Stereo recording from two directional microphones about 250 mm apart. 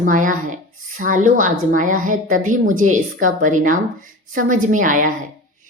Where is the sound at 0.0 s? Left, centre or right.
Right.